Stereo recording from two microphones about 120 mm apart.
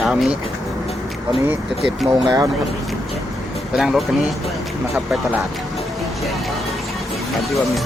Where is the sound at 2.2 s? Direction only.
30° right (ahead or behind).